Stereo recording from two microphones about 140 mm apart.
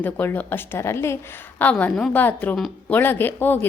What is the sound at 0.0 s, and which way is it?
A woman's voice, 15° left (ahead or behind).